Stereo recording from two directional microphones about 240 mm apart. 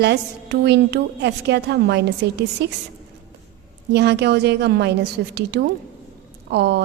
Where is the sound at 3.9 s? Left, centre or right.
Right.